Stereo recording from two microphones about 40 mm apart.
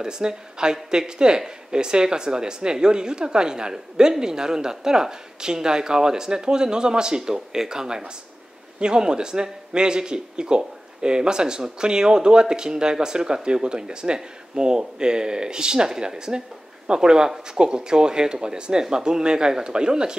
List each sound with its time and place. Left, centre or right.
0.0 s a man's voice: centre